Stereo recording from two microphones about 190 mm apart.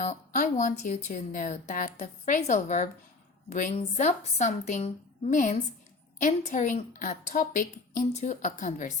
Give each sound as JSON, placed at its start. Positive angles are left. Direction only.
{"t": 0.0, "sound": "a woman's voice", "side_deg": 40}